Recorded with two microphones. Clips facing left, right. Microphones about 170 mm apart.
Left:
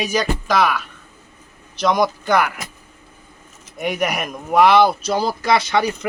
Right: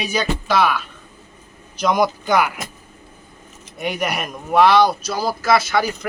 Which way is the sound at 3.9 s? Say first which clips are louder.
Left 2 dB; 10° left (ahead or behind).